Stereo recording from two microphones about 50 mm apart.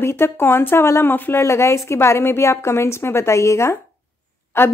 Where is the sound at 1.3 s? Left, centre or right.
Left.